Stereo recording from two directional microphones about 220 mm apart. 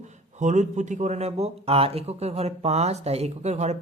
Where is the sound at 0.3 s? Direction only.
35° right (ahead or behind).